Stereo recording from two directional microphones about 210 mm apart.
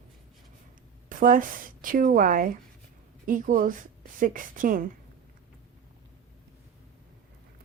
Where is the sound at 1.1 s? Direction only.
40° right (ahead or behind).